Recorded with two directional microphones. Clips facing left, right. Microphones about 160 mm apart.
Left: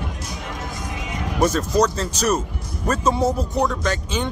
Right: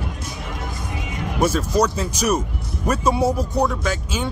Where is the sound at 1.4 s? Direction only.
10° right (ahead or behind).